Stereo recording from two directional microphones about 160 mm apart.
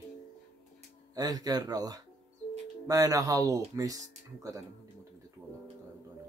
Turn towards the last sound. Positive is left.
turn(degrees=-20)  # may be behind; listen again after turning